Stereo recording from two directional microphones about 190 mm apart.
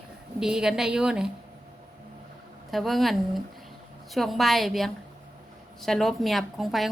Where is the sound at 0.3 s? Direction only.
5° right (ahead or behind).